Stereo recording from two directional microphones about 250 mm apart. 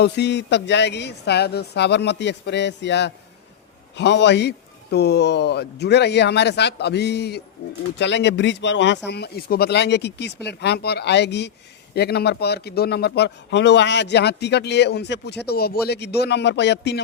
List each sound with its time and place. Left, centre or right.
0.0 s speech: left